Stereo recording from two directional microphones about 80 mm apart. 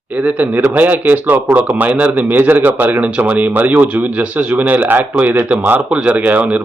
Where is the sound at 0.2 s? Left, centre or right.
Right.